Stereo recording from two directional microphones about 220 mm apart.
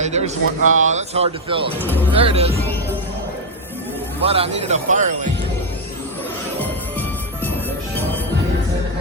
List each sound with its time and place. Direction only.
0.0 s speech: 30° right (ahead or behind)
4.3 s speech: 25° right (ahead or behind)